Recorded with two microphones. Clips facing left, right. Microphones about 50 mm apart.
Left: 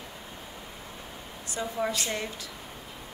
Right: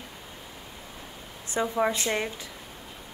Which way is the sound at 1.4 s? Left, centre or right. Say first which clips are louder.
Right 5 dB; right.